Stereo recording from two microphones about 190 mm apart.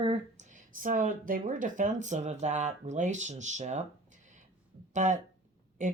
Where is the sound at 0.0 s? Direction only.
35° right (ahead or behind).